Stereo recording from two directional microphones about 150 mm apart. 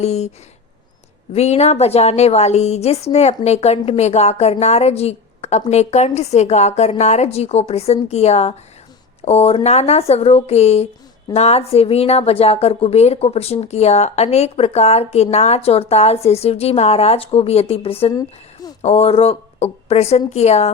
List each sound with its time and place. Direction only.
0.0 s a woman's voice: 45° left (ahead or behind)
1.3 s a woman's voice: 45° left (ahead or behind)
18.1 s a sound: 25° left (ahead or behind)
18.8 s a woman's voice: 45° left (ahead or behind)